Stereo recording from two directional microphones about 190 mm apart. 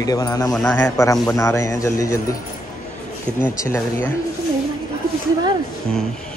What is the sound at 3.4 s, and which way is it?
Speech, 15° left (ahead or behind).